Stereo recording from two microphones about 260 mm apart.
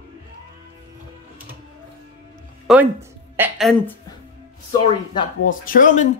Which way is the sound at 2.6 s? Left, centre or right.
Centre.